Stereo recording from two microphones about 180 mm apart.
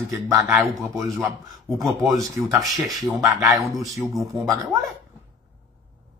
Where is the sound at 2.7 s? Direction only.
Centre (ahead or behind).